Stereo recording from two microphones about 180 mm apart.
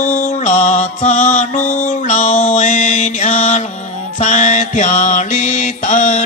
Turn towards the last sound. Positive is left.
turn(degrees=45)  # may be behind; listen again after turning